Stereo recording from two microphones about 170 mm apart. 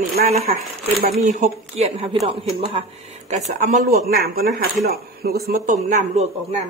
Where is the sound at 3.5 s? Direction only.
50° right (ahead or behind).